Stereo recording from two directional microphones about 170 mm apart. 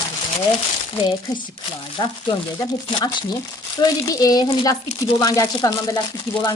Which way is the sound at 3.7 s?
20° left (ahead or behind).